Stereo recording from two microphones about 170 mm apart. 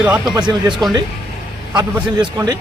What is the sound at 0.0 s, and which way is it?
Speech, 5° right (ahead or behind).